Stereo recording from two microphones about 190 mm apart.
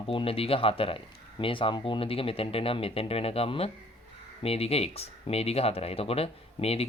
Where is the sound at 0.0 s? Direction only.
30° left (ahead or behind).